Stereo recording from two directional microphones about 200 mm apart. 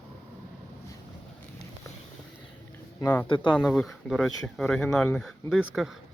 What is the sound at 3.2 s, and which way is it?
Speech, 25° left (ahead or behind).